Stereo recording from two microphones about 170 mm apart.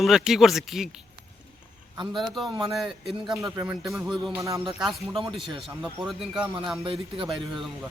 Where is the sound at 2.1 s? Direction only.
Centre (ahead or behind).